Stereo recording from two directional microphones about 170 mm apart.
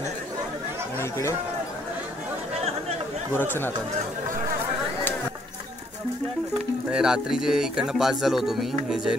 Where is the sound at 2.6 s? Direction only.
40° right (ahead or behind).